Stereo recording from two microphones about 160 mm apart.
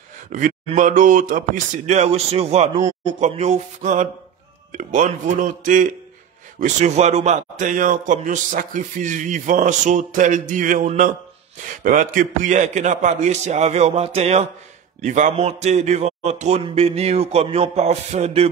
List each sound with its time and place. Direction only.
0.3 s a man's voice: 55° right (ahead or behind)
6.8 s a man's voice: 45° right (ahead or behind)